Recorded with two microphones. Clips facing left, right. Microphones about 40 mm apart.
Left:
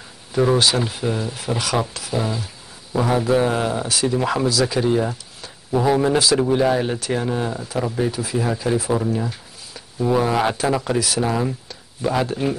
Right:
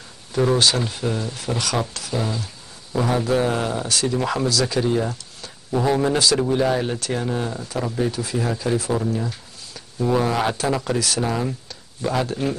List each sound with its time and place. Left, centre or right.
0.3 s speech: centre